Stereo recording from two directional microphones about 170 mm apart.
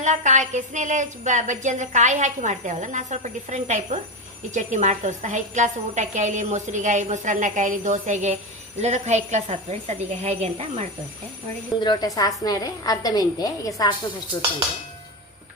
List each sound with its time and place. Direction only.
0.0 s a woman's voice: 45° right (ahead or behind)
11.8 s a woman's voice: 25° left (ahead or behind)